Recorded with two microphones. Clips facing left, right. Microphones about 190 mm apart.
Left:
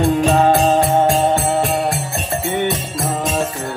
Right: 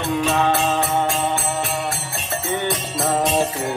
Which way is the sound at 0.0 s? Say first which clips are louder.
Left 6 dB; 45° left (ahead or behind).